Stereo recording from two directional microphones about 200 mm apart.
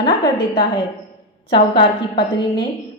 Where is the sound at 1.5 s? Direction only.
25° left (ahead or behind).